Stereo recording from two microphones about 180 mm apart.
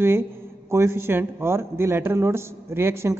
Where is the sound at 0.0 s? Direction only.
15° right (ahead or behind).